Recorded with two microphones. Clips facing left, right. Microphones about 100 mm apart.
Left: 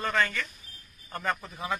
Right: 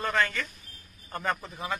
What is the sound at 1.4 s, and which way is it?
Speech, centre (ahead or behind).